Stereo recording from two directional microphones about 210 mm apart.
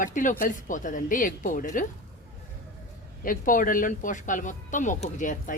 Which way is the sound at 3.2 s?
40° left (ahead or behind).